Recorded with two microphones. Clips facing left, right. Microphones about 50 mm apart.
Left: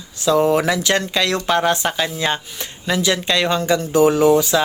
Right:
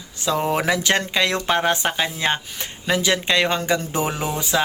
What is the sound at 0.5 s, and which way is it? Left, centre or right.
Speech, right.